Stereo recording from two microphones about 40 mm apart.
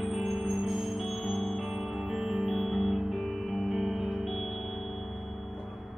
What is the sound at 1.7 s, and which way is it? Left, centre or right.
Music, centre.